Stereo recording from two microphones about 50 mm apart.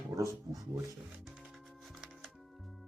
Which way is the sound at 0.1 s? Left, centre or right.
Right.